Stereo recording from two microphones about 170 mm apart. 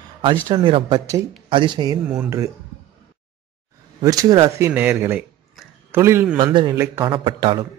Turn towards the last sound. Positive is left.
turn(degrees=-30)  # may be behind; listen again after turning